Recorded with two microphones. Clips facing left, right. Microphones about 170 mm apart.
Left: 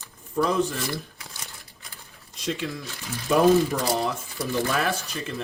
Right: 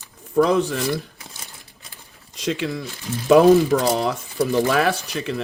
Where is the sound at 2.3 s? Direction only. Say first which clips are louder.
Right 5 dB; 90° right; by 5.4 s 75° right (ahead or behind).